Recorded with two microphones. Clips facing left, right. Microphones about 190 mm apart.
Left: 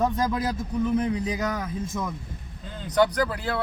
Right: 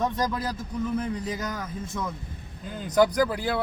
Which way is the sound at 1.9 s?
5° left (ahead or behind).